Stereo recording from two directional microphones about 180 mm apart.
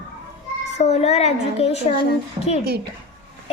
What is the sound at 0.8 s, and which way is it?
A child's voice, 40° left (ahead or behind).